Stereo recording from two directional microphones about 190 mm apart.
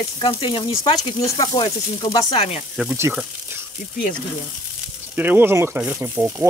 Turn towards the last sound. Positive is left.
turn(degrees=-10)  # may be behind; listen again after turning